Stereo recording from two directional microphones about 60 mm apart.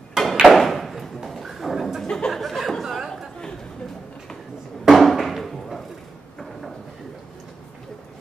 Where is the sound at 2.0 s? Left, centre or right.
Centre.